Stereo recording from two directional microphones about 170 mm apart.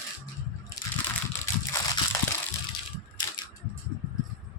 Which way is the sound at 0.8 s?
20° left (ahead or behind).